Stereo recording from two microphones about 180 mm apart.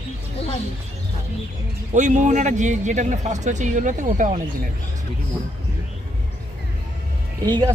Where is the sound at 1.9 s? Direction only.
40° right (ahead or behind).